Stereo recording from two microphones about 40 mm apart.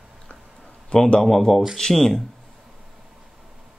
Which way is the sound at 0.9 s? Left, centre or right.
Left.